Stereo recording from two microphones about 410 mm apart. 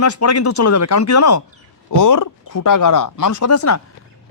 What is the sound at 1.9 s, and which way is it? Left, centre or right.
A man's voice, left.